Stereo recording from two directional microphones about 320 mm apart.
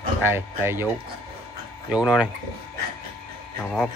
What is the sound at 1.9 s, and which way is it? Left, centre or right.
Speech, centre.